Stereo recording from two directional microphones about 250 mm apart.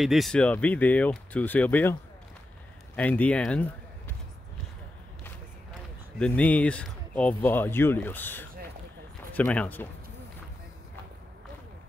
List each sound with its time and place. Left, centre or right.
0.0 s speech: centre
3.0 s speech: centre
6.1 s speech: centre